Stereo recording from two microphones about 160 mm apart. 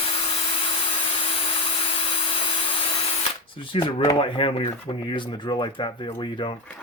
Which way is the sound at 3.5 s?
30° left (ahead or behind).